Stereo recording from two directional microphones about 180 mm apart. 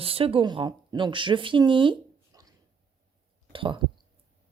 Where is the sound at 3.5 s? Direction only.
30° right (ahead or behind).